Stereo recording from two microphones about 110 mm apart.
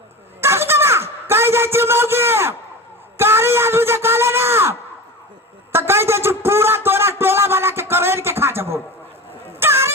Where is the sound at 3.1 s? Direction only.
20° right (ahead or behind).